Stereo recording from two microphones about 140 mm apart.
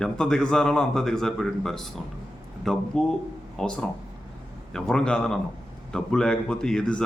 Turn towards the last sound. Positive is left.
turn(degrees=5)  # may be behind; listen again after turning